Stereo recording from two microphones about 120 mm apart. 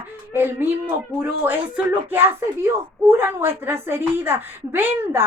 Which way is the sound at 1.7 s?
15° right (ahead or behind).